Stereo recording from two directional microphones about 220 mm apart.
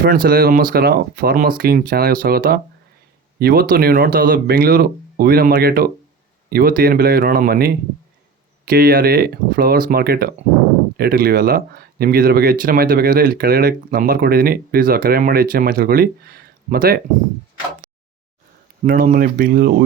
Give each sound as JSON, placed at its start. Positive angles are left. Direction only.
{"t": 0.0, "sound": "speech", "side_deg": -40}
{"t": 18.9, "sound": "speech", "side_deg": -40}